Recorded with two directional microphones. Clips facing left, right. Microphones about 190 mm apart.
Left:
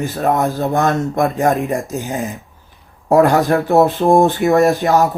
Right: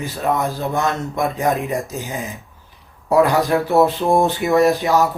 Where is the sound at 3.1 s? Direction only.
45° left (ahead or behind).